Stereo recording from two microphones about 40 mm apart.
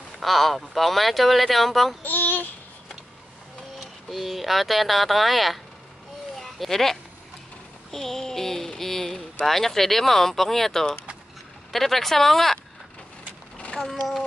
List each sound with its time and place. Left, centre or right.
0.2 s speech: centre
2.0 s child singing: left
3.8 s speech: centre
6.3 s a sound: centre
7.9 s speech: centre